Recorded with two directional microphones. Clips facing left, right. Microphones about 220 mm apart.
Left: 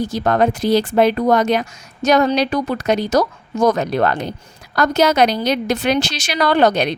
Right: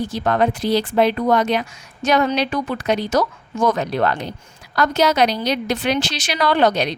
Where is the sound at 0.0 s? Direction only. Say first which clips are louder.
Left 2 dB; 40° left (ahead or behind).